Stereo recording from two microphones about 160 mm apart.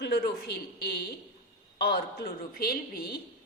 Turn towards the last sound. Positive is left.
turn(degrees=70)  # may be behind; listen again after turning